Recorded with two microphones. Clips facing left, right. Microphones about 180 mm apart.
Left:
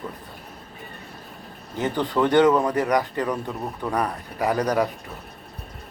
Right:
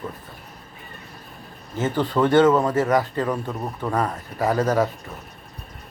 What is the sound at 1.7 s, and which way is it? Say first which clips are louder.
A man's voice: right 1 dB; 15° left (ahead or behind).